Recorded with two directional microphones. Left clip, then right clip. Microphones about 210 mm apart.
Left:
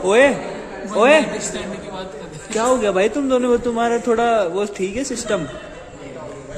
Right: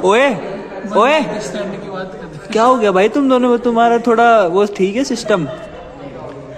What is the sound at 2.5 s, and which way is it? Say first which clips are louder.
A man's voice: right 6 dB; 15° right (ahead or behind).